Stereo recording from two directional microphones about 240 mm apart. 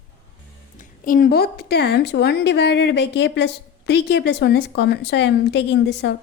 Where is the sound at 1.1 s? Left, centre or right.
Left.